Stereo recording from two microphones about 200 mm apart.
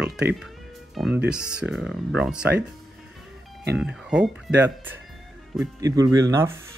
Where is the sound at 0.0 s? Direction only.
5° right (ahead or behind).